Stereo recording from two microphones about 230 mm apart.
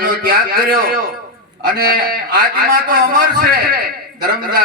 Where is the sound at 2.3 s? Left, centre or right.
Right.